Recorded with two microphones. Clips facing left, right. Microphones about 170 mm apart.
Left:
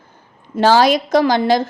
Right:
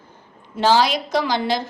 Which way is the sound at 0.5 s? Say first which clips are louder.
Left 5 dB; 45° left (ahead or behind).